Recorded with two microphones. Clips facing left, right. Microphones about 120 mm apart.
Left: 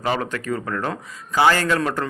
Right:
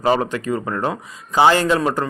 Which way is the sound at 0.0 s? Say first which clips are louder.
Right 6 dB; 35° right (ahead or behind).